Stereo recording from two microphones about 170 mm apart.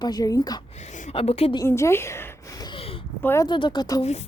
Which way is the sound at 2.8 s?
35° left (ahead or behind).